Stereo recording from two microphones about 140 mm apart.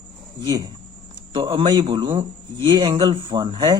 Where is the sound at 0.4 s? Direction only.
30° right (ahead or behind).